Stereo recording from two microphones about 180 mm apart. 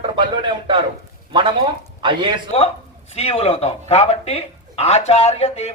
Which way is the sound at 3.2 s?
35° left (ahead or behind).